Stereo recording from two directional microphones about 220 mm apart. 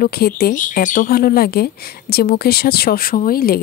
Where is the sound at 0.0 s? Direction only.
40° left (ahead or behind).